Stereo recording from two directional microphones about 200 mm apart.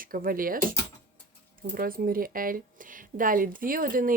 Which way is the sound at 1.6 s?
45° right (ahead or behind).